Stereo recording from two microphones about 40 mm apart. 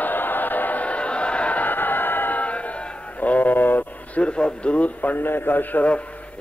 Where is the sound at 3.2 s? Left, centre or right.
Left.